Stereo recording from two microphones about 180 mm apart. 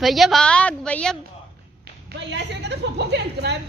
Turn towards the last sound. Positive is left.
turn(degrees=-70)  # may be behind; listen again after turning